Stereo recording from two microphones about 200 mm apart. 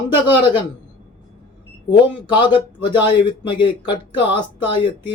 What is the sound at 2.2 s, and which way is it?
Speech, 25° left (ahead or behind).